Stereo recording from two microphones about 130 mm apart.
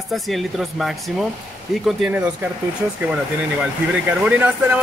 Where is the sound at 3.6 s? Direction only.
5° right (ahead or behind).